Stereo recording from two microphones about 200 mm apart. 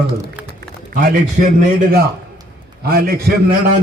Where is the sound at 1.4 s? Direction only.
40° right (ahead or behind).